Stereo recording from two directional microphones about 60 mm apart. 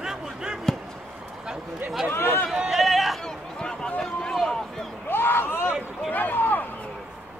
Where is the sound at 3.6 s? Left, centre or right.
Centre.